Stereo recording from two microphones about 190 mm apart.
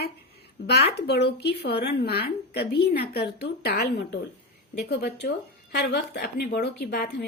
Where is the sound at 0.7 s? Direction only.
60° left (ahead or behind).